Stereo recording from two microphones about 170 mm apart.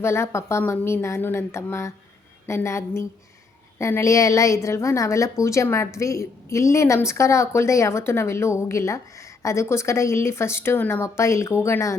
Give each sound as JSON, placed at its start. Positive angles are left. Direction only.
{"t": 0.0, "sound": "a woman's voice", "side_deg": 15}